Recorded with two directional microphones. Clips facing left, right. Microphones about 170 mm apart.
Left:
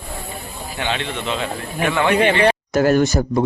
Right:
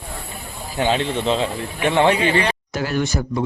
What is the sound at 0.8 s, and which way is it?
Speech, 40° right (ahead or behind).